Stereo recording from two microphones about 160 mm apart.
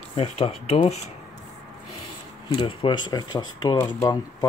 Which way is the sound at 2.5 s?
35° left (ahead or behind).